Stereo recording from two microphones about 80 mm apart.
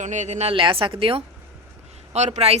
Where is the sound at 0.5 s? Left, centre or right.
Right.